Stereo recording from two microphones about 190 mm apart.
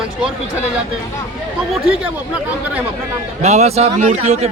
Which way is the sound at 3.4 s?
35° right (ahead or behind).